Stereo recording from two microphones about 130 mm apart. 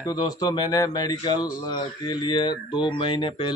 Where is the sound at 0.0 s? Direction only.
30° left (ahead or behind).